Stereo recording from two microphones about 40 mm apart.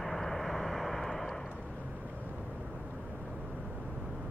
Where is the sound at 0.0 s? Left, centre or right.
Centre.